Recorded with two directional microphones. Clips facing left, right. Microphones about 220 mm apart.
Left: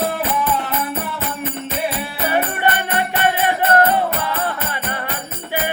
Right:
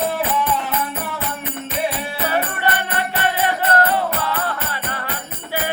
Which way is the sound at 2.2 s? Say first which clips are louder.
Left 3 dB; 20° left (ahead or behind).